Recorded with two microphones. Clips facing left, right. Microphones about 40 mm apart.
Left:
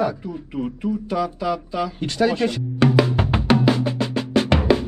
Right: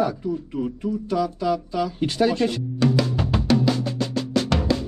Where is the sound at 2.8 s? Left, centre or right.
Left.